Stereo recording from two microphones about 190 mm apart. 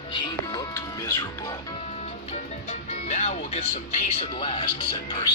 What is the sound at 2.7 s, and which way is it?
Speech, 40° left (ahead or behind).